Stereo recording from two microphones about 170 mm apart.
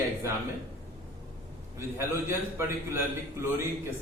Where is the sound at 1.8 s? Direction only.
15° right (ahead or behind).